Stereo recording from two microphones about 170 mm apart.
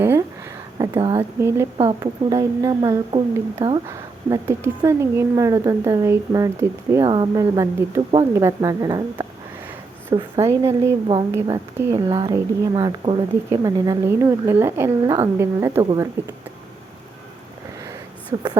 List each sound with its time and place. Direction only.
0.0 s speech: 15° right (ahead or behind); by 3.8 s 30° right (ahead or behind)
3.8 s speech: 15° right (ahead or behind)
18.3 s speech: 25° right (ahead or behind)